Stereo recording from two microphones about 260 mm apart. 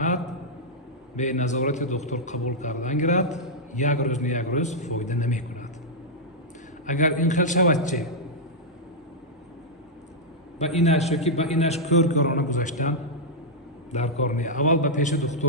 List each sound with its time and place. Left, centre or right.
1.1 s a man's voice: left
6.8 s a man's voice: left
10.8 s a man's voice: left